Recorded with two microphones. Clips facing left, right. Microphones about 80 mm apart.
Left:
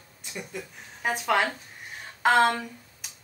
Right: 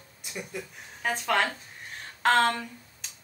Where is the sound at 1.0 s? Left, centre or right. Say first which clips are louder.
Left 2 dB; centre.